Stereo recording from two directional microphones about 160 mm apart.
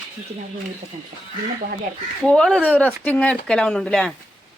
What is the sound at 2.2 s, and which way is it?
Speech, 5° left (ahead or behind).